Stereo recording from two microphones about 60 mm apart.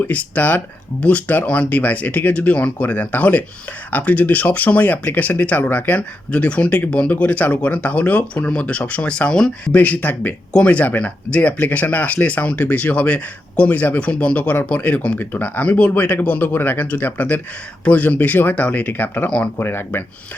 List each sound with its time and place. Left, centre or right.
0.0 s speech: left
9.7 s speech: left